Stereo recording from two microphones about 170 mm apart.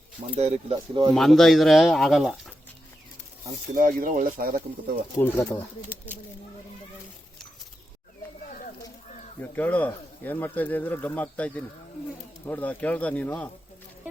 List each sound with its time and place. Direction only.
0.3 s speech: 40° right (ahead or behind)
1.1 s speech: centre (ahead or behind)
3.8 s speech: 55° right (ahead or behind)
5.2 s speech: 15° left (ahead or behind)
8.4 s a sound: 50° left (ahead or behind)
9.4 s speech: 10° left (ahead or behind)